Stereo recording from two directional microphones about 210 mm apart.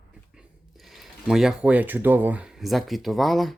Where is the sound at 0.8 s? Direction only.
Centre (ahead or behind).